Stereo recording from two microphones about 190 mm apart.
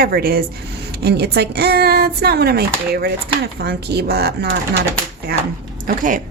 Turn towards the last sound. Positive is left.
turn(degrees=-45)  # may be behind; listen again after turning